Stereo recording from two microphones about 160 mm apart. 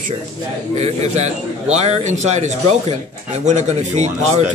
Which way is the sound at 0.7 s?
45° right (ahead or behind).